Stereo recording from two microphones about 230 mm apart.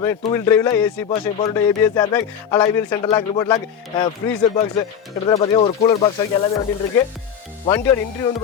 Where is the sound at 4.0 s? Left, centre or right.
Left.